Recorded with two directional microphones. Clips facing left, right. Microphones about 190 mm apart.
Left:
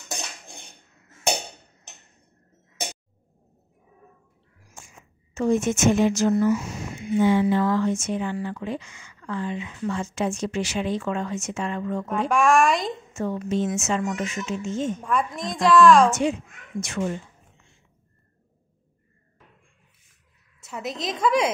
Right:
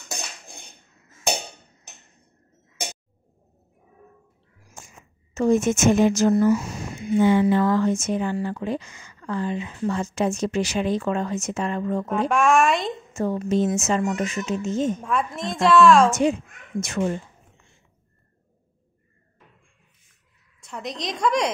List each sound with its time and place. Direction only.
4.7 s a sound: 40° right (ahead or behind)
7.2 s speech: 55° right (ahead or behind); by 12.1 s 35° right (ahead or behind)
12.1 s a woman's voice: centre (ahead or behind)
13.1 s speech: 35° right (ahead or behind)
15.0 s a woman's voice: centre (ahead or behind)
16.1 s speech: 40° right (ahead or behind)
20.6 s a woman's voice: 5° left (ahead or behind)